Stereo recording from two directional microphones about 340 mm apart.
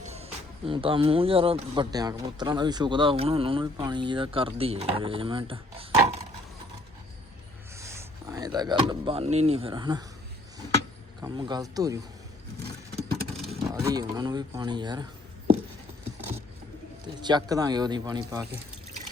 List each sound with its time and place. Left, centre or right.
0.0 s speech: centre
7.8 s speech: centre
11.2 s speech: centre
13.0 s vehicle: right
13.3 s speech: centre
17.2 s speech: centre